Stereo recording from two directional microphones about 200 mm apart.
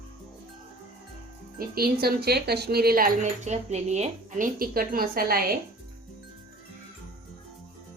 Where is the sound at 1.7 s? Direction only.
50° right (ahead or behind).